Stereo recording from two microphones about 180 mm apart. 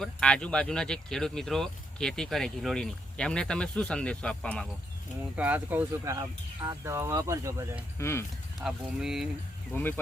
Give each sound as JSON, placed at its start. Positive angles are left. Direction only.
{"t": 0.0, "sound": "speech", "side_deg": 5}
{"t": 5.4, "sound": "speech", "side_deg": -10}
{"t": 7.9, "sound": "speech", "side_deg": 15}
{"t": 8.6, "sound": "speech", "side_deg": 0}
{"t": 9.7, "sound": "speech", "side_deg": 15}